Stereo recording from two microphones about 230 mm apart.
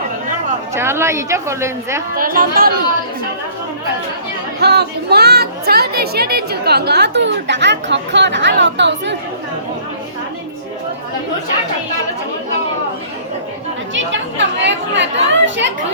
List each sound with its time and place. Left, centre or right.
0.7 s speech: centre
2.1 s speech: right
4.6 s speech: right
13.9 s speech: right